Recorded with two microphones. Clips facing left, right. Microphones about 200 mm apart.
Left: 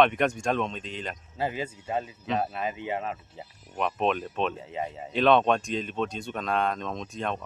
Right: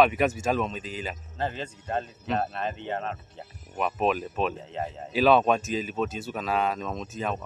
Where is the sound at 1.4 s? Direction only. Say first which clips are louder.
Left 2 dB; 10° left (ahead or behind).